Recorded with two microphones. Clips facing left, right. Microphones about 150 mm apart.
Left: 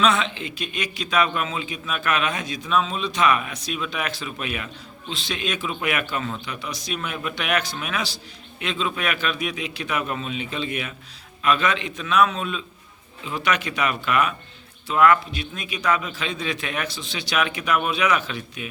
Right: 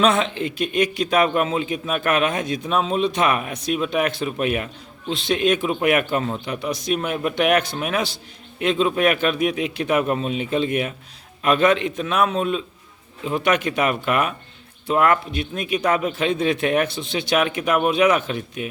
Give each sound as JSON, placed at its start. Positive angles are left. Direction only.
{"t": 0.0, "sound": "a man's voice", "side_deg": -50}